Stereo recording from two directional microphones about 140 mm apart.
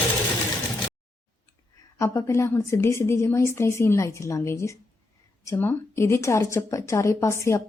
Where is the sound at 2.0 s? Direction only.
20° left (ahead or behind).